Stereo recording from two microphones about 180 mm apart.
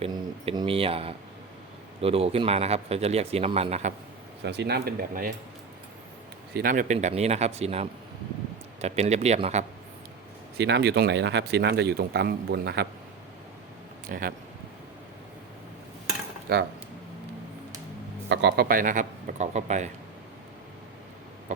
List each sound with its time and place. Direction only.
0.0 s speech: 30° right (ahead or behind)
4.4 s speech: 65° right (ahead or behind)
6.5 s speech: 55° right (ahead or behind); by 9.6 s 40° right (ahead or behind)
10.6 s speech: 70° right (ahead or behind)
14.1 s a man's voice: 50° right (ahead or behind)
16.5 s speech: 60° right (ahead or behind)
18.3 s a man's voice: 65° right (ahead or behind); by 19.9 s 40° right (ahead or behind)